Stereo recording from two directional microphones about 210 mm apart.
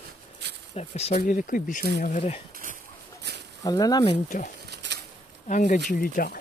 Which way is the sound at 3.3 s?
50° right (ahead or behind).